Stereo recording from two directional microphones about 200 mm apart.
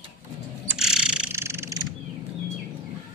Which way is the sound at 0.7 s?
5° right (ahead or behind).